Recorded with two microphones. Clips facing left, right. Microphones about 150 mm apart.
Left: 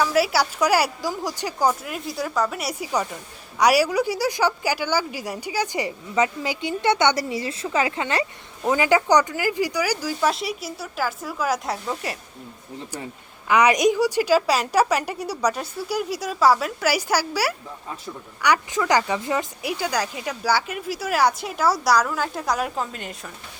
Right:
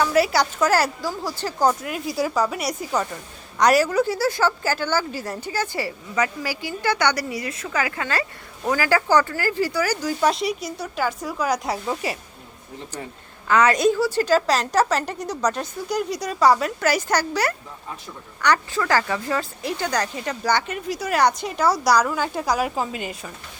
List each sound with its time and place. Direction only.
0.0 s a woman's voice: 5° left (ahead or behind)
1.6 s a woman's voice: centre (ahead or behind)
13.5 s a woman's voice: 15° left (ahead or behind); by 23.3 s 5° right (ahead or behind)